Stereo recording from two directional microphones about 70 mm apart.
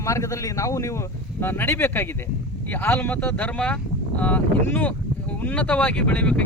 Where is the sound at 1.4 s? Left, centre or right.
Left.